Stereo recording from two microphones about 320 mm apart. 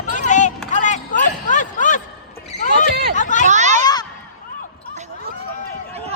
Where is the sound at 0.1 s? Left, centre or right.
Left.